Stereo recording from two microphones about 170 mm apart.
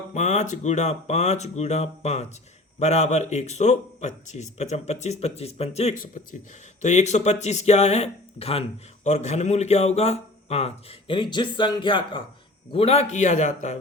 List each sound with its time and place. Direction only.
0.1 s speech: 45° left (ahead or behind)